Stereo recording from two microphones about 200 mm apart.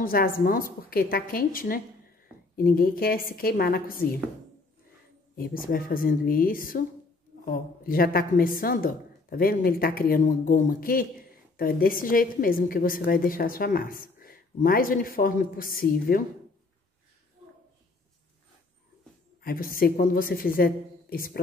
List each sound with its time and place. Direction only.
0.0 s a woman's voice: 45° left (ahead or behind)
5.3 s a woman's voice: 45° left (ahead or behind)
19.4 s a woman's voice: 45° left (ahead or behind)